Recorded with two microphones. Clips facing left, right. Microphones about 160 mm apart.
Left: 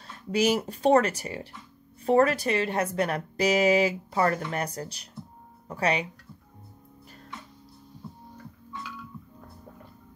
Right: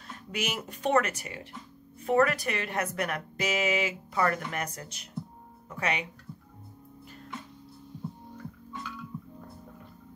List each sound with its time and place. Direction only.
0.3 s a woman's voice: 35° left (ahead or behind)